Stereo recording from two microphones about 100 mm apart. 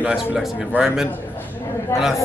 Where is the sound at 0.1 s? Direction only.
5° right (ahead or behind).